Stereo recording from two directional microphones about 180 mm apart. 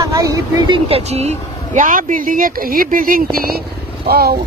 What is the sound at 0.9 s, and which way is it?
Speech, 35° right (ahead or behind).